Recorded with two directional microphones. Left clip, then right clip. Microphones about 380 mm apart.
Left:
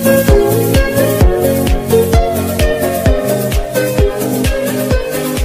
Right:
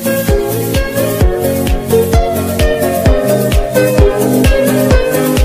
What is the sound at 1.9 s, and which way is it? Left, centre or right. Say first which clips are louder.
Music: even; centre.